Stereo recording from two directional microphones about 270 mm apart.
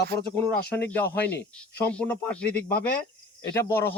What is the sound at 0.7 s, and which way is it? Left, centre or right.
Speech, centre.